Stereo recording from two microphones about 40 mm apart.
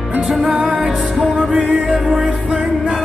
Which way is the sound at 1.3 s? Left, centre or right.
Right.